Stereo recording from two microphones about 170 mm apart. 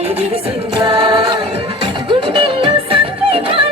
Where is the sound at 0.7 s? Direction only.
30° right (ahead or behind).